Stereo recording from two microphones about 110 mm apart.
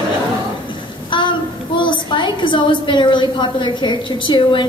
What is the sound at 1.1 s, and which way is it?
Child singing, 45° left (ahead or behind).